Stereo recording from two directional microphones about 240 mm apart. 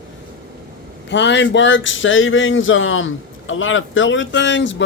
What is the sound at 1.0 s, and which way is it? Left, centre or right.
Speech, left.